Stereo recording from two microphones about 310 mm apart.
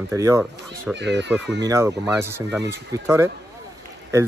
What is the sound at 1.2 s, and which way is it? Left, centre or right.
Speech, centre.